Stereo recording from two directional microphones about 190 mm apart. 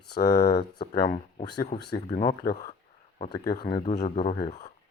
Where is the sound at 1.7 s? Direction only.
30° left (ahead or behind).